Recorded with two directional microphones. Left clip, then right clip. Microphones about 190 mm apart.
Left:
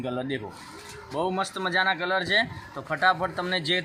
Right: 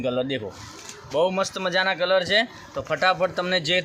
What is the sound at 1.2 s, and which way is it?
Speech, 60° right (ahead or behind).